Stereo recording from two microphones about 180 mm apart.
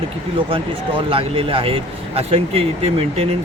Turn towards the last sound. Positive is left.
turn(degrees=-35)  # may be behind; listen again after turning